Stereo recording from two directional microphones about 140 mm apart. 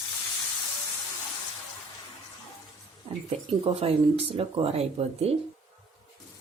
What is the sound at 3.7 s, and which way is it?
Speech, 45° right (ahead or behind).